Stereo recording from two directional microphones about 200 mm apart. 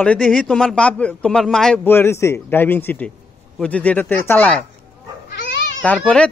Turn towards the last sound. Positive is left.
turn(degrees=5)  # may be behind; listen again after turning